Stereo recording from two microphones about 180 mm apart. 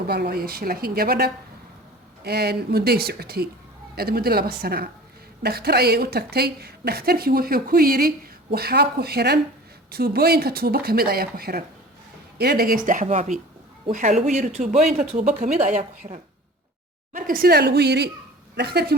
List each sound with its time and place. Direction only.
0.1 s a woman's voice: 60° right (ahead or behind); by 16.2 s 40° right (ahead or behind)
17.2 s a woman's voice: 50° right (ahead or behind)